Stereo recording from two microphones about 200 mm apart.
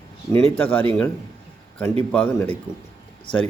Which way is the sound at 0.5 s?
10° left (ahead or behind).